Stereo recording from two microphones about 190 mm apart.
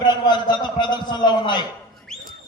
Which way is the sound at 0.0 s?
20° left (ahead or behind).